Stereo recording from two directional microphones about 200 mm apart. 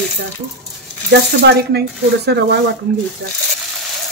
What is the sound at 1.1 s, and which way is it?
Speech, 55° right (ahead or behind).